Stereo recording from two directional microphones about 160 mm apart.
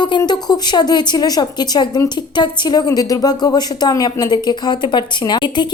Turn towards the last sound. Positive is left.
turn(degrees=25)  # may be behind; listen again after turning